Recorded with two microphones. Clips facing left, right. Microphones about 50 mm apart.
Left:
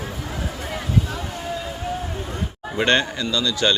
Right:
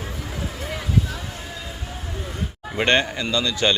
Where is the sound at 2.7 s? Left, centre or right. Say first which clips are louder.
Even; right.